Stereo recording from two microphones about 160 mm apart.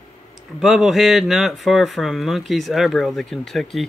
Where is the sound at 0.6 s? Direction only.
Centre (ahead or behind).